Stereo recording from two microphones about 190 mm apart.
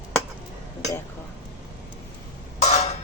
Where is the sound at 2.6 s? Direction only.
35° left (ahead or behind).